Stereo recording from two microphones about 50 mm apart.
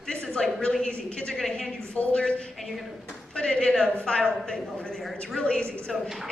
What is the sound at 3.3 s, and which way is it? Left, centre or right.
Speech, centre.